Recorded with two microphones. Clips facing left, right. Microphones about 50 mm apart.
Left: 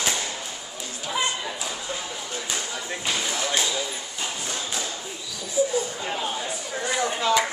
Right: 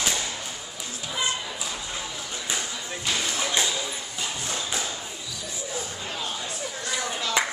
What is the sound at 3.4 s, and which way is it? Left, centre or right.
Basketball bounce, centre.